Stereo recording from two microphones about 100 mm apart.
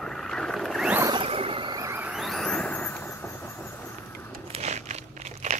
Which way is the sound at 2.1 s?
Centre (ahead or behind).